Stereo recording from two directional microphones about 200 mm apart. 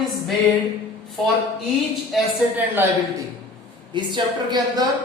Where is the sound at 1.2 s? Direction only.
Centre (ahead or behind).